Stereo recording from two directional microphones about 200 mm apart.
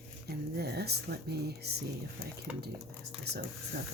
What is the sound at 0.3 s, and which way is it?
Speech, 55° right (ahead or behind).